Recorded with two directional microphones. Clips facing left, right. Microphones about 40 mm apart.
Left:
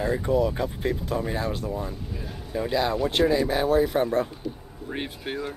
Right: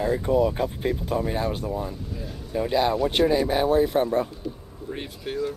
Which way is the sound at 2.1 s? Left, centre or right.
Centre.